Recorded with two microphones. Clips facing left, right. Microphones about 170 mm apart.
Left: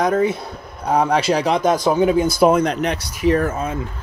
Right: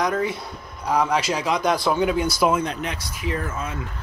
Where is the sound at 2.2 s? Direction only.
50° left (ahead or behind).